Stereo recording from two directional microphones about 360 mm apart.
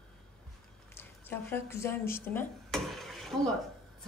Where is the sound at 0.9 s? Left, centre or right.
Centre.